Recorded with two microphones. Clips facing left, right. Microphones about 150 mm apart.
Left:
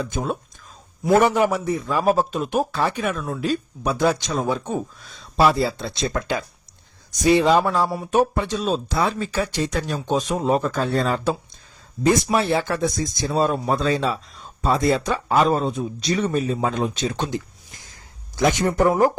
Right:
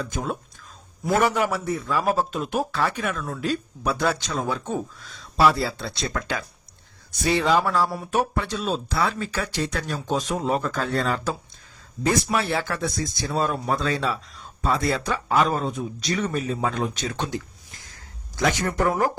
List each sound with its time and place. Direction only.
0.0 s speech: 25° left (ahead or behind)
7.3 s speech: 20° left (ahead or behind)
18.4 s speech: 25° left (ahead or behind)